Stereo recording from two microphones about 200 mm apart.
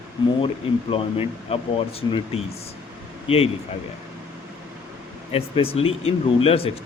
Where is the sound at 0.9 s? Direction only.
30° left (ahead or behind).